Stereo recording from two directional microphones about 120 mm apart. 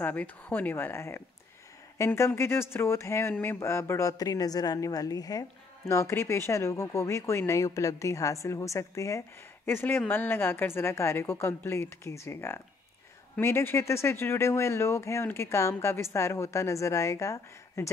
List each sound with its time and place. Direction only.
0.0 s speech: 15° left (ahead or behind)